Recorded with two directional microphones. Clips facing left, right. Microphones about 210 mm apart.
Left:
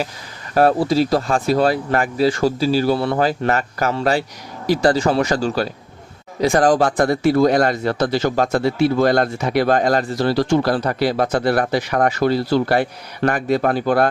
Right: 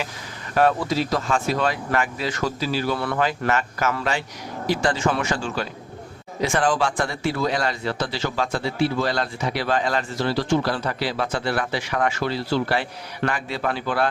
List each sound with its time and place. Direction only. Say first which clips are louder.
0.5 s speech: left 5 dB; 35° left (ahead or behind)